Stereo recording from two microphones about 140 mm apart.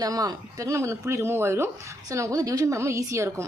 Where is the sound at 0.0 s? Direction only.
25° right (ahead or behind).